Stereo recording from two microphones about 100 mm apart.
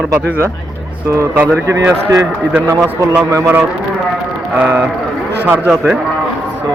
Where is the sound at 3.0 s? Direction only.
35° right (ahead or behind).